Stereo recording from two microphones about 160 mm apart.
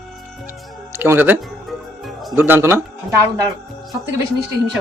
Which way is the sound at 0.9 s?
15° right (ahead or behind).